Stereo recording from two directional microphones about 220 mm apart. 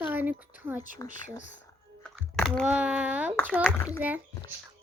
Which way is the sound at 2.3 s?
5° left (ahead or behind).